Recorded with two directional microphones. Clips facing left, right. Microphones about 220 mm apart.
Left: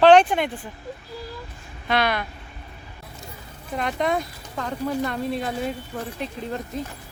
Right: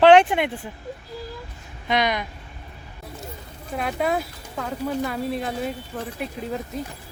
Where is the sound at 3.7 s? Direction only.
5° right (ahead or behind).